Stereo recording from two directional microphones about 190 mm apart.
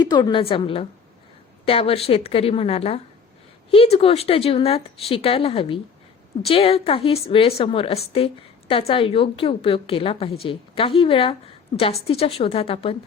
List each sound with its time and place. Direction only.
0.0 s a woman's voice: 20° left (ahead or behind)